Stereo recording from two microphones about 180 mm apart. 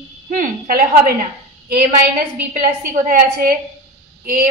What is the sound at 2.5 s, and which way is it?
A woman's voice, 50° right (ahead or behind).